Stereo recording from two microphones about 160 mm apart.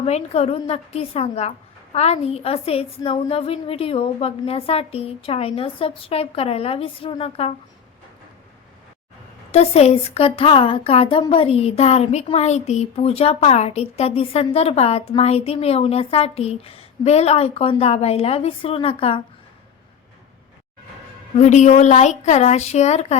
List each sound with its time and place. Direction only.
0.0 s speech: 40° left (ahead or behind)
9.5 s speech: 40° left (ahead or behind)
21.3 s a woman's voice: 45° left (ahead or behind)